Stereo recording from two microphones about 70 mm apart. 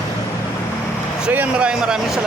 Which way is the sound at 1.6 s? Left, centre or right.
Centre.